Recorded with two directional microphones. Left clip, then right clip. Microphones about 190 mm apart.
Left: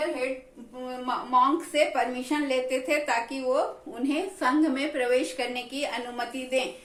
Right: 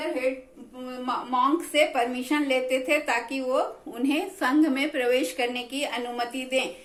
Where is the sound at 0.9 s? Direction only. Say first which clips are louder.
Even; 20° right (ahead or behind).